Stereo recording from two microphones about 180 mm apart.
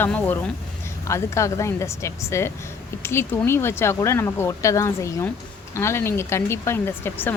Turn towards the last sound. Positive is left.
turn(degrees=10)  # may be behind; listen again after turning